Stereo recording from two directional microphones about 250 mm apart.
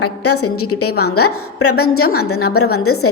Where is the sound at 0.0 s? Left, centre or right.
Left.